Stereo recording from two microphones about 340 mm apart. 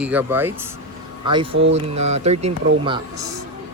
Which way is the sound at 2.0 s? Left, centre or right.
Centre.